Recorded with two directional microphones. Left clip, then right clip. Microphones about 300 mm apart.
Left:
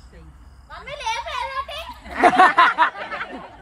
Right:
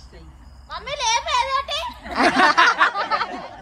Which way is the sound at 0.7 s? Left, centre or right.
Centre.